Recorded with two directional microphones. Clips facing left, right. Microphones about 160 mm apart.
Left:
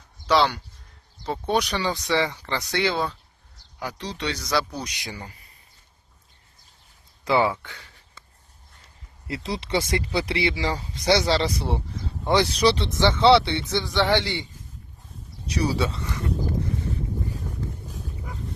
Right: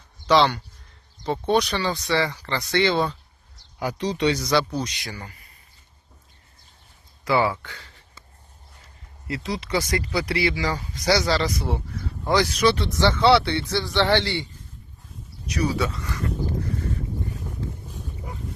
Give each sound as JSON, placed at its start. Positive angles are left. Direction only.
{"t": 0.3, "sound": "speech", "side_deg": 5}
{"t": 3.8, "sound": "speech", "side_deg": -10}
{"t": 4.8, "sound": "speech", "side_deg": 15}
{"t": 7.3, "sound": "speech", "side_deg": 20}
{"t": 9.2, "sound": "speech", "side_deg": 30}
{"t": 15.4, "sound": "speech", "side_deg": 30}